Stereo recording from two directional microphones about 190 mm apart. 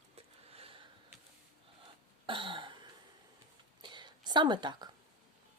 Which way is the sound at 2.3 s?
25° right (ahead or behind).